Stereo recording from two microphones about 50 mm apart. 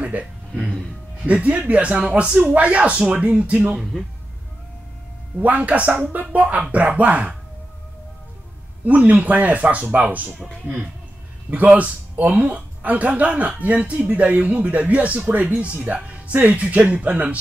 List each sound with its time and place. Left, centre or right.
0.0 s a sound: right
1.2 s speech: right
3.9 s speech: centre
5.4 s speech: right
8.8 s speech: right
11.5 s speech: right